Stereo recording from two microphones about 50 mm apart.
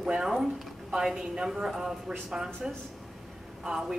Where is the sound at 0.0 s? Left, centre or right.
Centre.